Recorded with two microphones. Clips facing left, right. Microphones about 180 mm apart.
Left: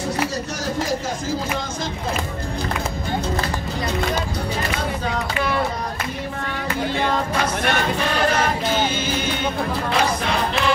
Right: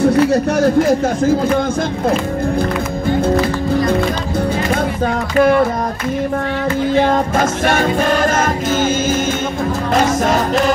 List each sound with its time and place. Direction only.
0.0 s speech: 60° right (ahead or behind)
5.0 s speech: 50° right (ahead or behind)
7.0 s music: 45° right (ahead or behind)